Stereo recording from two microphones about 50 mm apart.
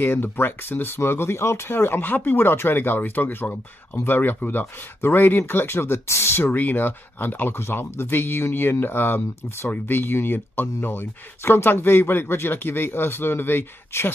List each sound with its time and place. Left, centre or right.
0.0 s speech: left
6.5 s speech: left
7.5 s speech: left